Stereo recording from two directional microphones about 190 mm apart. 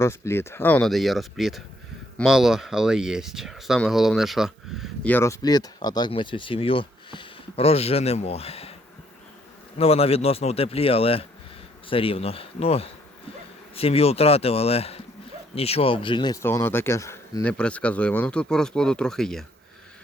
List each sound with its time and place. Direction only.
0.0 s speech: 15° left (ahead or behind)
5.1 s speech: 15° left (ahead or behind); by 8.7 s 30° left (ahead or behind)
9.7 s speech: 30° left (ahead or behind); by 19.5 s centre (ahead or behind)